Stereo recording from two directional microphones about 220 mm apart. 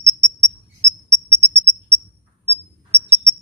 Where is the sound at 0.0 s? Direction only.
15° right (ahead or behind).